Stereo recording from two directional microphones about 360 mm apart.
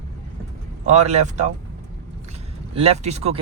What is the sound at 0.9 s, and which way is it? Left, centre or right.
Speech, centre.